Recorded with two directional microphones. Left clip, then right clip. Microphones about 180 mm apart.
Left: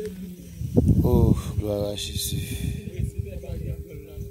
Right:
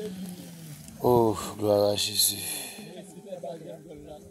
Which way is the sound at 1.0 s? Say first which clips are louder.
Right 2 dB; 15° left (ahead or behind).